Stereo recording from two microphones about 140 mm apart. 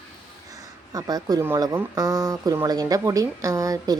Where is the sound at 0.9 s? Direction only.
25° right (ahead or behind).